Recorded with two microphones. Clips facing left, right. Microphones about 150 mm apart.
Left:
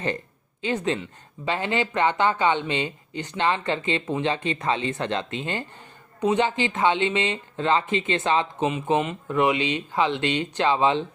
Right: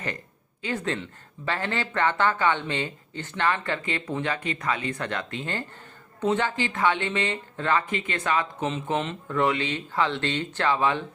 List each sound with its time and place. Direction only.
0.6 s speech: 20° left (ahead or behind)
8.7 s speech: 10° left (ahead or behind)